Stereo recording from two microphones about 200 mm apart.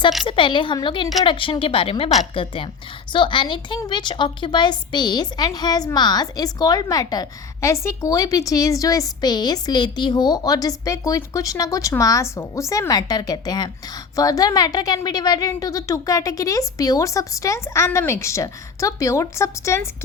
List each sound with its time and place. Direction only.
0.3 s a woman's voice: 25° left (ahead or behind)